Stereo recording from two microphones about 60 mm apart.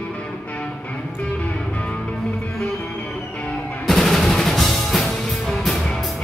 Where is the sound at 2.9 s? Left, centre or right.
Centre.